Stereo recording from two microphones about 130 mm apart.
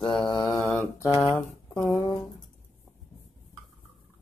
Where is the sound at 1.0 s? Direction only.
20° right (ahead or behind).